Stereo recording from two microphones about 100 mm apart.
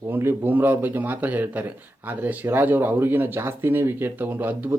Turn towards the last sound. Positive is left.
turn(degrees=-20)  # may be behind; listen again after turning